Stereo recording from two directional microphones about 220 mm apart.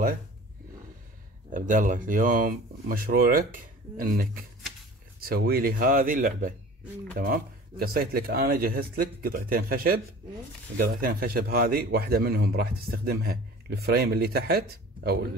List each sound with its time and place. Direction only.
1.5 s a man's voice: 35° right (ahead or behind)